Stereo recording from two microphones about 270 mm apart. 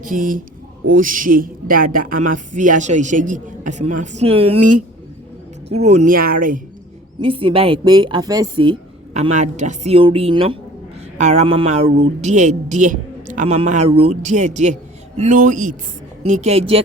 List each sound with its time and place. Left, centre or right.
0.0 s a woman's voice: right
5.7 s a woman's voice: right
7.2 s a woman's voice: centre